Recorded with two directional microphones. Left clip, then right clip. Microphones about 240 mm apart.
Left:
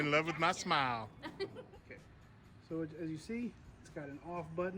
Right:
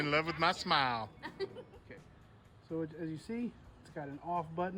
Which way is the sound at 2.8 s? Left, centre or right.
Right.